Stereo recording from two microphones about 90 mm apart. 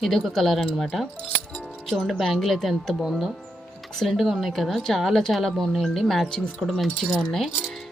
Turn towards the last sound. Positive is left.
turn(degrees=0)  # may be behind; listen again after turning